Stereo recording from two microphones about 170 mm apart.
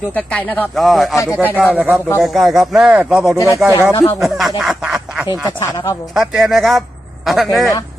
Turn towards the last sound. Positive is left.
turn(degrees=0)  # may be behind; listen again after turning